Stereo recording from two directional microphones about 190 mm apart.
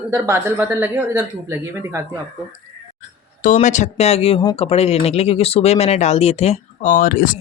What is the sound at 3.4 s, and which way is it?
Speech, 40° left (ahead or behind).